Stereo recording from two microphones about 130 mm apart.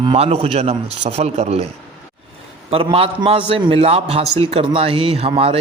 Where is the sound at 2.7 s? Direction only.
45° right (ahead or behind).